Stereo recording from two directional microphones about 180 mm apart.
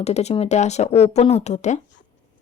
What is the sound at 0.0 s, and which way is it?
Speech, 35° left (ahead or behind).